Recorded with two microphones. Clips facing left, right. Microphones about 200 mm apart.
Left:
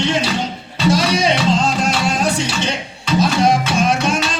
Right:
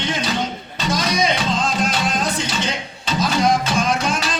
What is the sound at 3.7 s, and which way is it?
Music, 25° left (ahead or behind).